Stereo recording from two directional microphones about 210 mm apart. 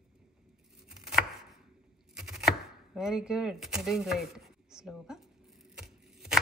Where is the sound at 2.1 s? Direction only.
Centre (ahead or behind).